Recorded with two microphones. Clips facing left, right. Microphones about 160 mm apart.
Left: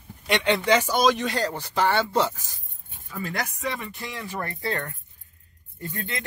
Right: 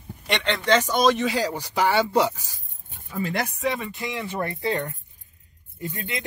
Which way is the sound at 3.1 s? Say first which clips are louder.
Right 4 dB; 25° right (ahead or behind).